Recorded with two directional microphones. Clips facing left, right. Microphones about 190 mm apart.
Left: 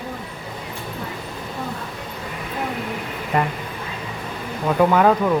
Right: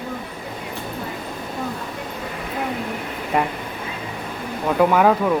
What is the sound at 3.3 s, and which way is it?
Speech, 10° right (ahead or behind).